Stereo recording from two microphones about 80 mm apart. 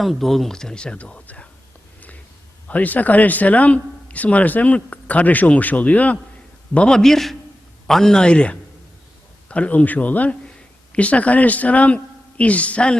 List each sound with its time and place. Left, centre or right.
0.0 s speech: centre
2.6 s a man's voice: centre